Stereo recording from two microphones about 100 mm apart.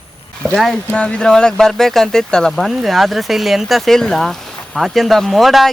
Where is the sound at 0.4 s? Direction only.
5° left (ahead or behind).